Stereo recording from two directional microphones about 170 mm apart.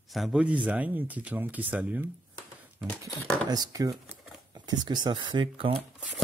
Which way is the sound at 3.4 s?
20° right (ahead or behind).